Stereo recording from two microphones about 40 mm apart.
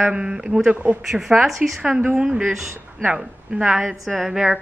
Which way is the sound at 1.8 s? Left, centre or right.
Right.